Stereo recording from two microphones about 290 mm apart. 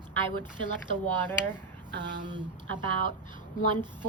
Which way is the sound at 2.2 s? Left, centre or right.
Centre.